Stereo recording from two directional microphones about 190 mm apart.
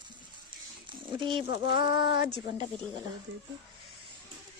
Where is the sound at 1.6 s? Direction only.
25° right (ahead or behind).